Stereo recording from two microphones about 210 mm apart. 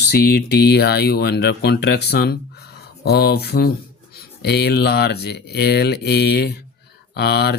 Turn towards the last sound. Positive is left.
turn(degrees=50)  # may be behind; listen again after turning